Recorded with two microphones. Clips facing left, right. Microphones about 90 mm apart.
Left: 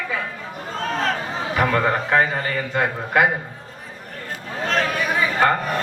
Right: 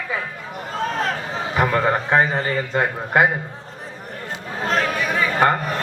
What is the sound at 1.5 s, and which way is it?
A man's voice, 25° right (ahead or behind).